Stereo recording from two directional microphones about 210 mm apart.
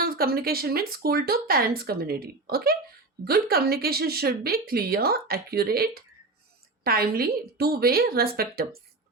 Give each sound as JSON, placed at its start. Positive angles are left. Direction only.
{"t": 0.0, "sound": "speech", "side_deg": -45}